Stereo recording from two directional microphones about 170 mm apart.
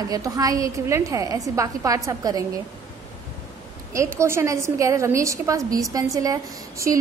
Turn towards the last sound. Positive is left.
turn(degrees=-20)  # may be behind; listen again after turning